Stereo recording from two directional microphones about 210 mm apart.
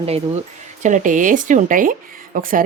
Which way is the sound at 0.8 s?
35° right (ahead or behind).